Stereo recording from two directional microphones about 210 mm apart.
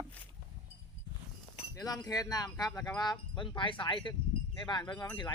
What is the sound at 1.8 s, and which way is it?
Speech, 15° left (ahead or behind).